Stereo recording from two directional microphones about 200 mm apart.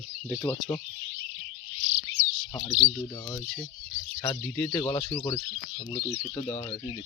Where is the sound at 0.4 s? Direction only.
5° left (ahead or behind).